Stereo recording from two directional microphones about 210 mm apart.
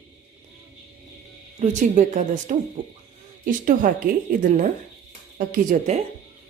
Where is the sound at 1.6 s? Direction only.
35° right (ahead or behind).